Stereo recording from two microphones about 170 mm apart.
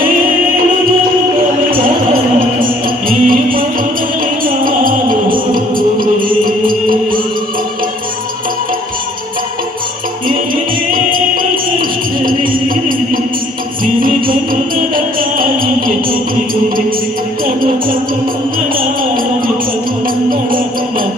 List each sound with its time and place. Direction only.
3.1 s music: 55° right (ahead or behind)
10.2 s music: 55° right (ahead or behind)
14.0 s music: 55° right (ahead or behind)
17.4 s music: 55° right (ahead or behind)